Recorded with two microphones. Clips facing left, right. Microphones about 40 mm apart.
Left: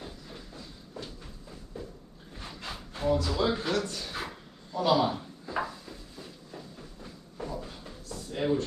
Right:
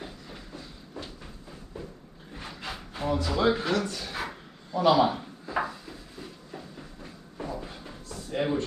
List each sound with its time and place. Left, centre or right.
2.3 s wood: right
3.1 s speech: right
4.7 s speech: right
5.0 s a sound: right
6.5 s train: centre
7.3 s a sound: right
8.3 s speech: right